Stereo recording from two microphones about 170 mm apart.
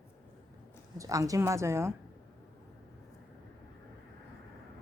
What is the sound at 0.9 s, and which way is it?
Speech, 20° right (ahead or behind).